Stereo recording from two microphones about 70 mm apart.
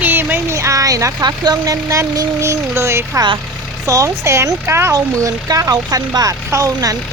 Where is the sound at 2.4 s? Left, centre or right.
Right.